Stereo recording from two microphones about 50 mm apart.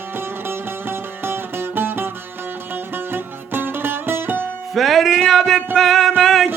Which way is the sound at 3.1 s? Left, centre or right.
Right.